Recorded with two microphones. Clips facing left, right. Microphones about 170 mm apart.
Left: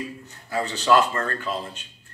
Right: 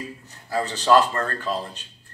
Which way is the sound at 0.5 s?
35° right (ahead or behind).